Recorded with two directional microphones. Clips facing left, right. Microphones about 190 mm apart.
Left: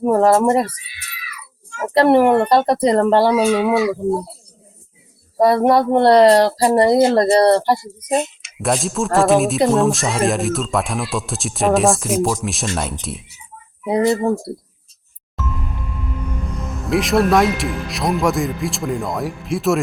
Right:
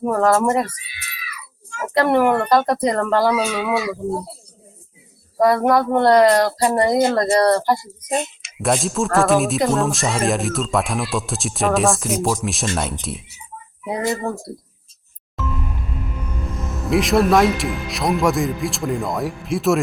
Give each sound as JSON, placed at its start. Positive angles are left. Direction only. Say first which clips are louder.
{"t": 0.0, "sound": "speech", "louder": "left 3 dB", "side_deg": 30}
{"t": 5.4, "sound": "speech", "louder": "left 2 dB", "side_deg": 30}
{"t": 8.5, "sound": "speech", "louder": "even", "side_deg": 0}
{"t": 13.8, "sound": "speech", "louder": "left 6 dB", "side_deg": 25}
{"t": 15.4, "sound": "music", "louder": "right 1 dB", "side_deg": 0}
{"t": 16.8, "sound": "speech", "louder": "even", "side_deg": 0}